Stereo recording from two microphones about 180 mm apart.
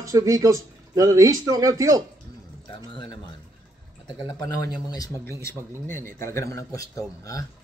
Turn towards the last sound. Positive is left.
turn(degrees=20)  # may be behind; listen again after turning